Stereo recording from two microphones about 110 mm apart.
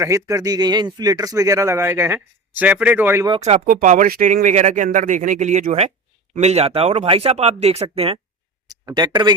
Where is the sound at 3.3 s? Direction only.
85° right.